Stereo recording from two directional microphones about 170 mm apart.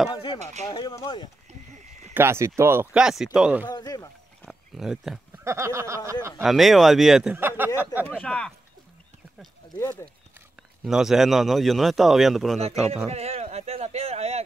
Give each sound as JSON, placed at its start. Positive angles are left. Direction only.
{"t": 0.1, "sound": "speech", "side_deg": 30}
{"t": 2.1, "sound": "a man's voice", "side_deg": -15}
{"t": 3.6, "sound": "speech", "side_deg": 25}
{"t": 4.4, "sound": "wild animals", "side_deg": 0}
{"t": 5.4, "sound": "speech", "side_deg": -15}
{"t": 6.4, "sound": "a man's voice", "side_deg": 0}
{"t": 8.1, "sound": "a man's voice", "side_deg": 5}
{"t": 9.8, "sound": "speech", "side_deg": 15}
{"t": 10.8, "sound": "a man's voice", "side_deg": 0}
{"t": 12.5, "sound": "a man's voice", "side_deg": -40}
{"t": 13.1, "sound": "a sound", "side_deg": -40}